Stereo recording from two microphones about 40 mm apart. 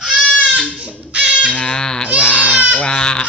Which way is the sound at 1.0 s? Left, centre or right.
Right.